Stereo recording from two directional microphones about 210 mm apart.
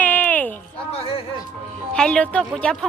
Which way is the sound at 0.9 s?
25° left (ahead or behind).